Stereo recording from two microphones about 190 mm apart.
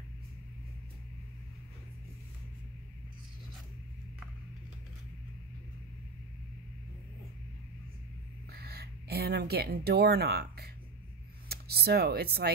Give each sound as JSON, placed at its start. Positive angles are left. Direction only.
{"t": 8.5, "sound": "speech", "side_deg": -55}